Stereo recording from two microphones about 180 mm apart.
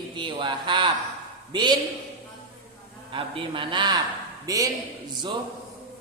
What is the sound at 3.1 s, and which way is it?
A man's voice, 30° right (ahead or behind).